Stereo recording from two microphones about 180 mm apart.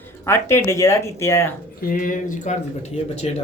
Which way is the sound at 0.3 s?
15° left (ahead or behind).